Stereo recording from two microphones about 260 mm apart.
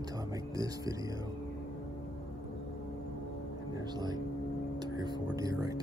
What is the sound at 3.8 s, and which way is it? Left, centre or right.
Speech, centre.